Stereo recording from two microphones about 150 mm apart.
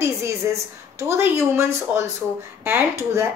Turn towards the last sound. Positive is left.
turn(degrees=-20)  # may be behind; listen again after turning